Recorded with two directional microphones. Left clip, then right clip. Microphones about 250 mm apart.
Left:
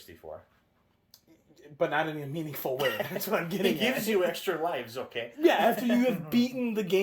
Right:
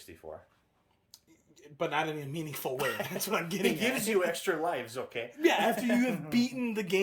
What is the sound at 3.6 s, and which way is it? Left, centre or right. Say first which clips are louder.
Speech: left 2 dB; right.